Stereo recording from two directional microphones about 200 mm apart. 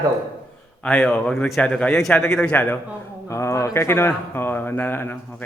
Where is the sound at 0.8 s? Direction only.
5° left (ahead or behind).